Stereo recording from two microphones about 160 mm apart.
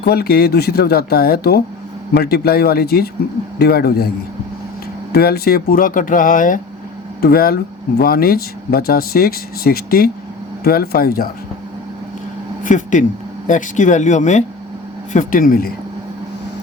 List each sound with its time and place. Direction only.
0.0 s speech: 75° left (ahead or behind)
5.1 s speech: 75° left (ahead or behind); by 6.6 s 55° left (ahead or behind)
7.2 s speech: 70° left (ahead or behind)
12.6 s speech: 55° left (ahead or behind)